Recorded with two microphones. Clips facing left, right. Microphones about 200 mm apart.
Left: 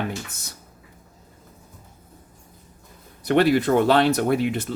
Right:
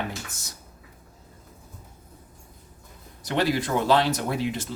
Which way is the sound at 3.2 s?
60° left (ahead or behind).